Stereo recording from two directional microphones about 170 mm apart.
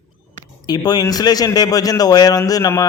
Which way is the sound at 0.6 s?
25° left (ahead or behind).